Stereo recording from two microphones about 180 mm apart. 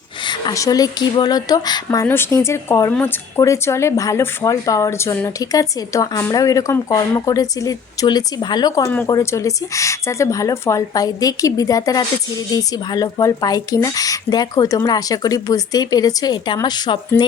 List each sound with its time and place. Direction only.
0.3 s speech: 20° left (ahead or behind)